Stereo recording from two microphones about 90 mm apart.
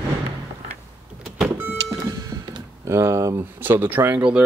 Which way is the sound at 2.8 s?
30° right (ahead or behind).